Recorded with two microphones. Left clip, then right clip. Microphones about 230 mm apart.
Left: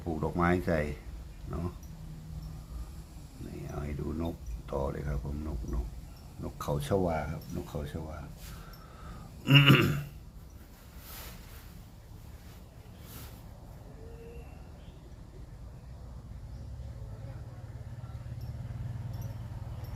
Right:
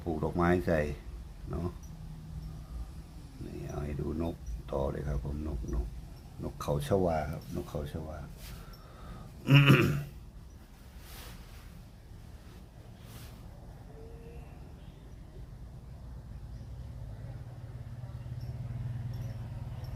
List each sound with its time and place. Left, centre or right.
0.0 s speech: centre
1.5 s dog: centre
3.7 s speech: centre
9.4 s speech: centre